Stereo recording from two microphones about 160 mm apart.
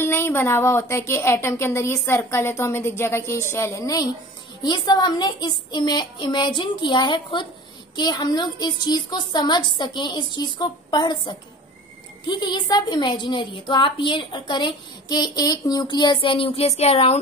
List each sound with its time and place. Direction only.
0.0 s a woman's voice: 15° left (ahead or behind); by 17.2 s 40° left (ahead or behind)